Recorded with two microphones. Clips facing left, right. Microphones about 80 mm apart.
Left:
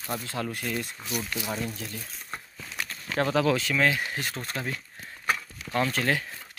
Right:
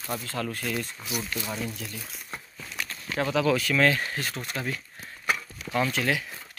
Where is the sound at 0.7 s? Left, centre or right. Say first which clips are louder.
Even; centre.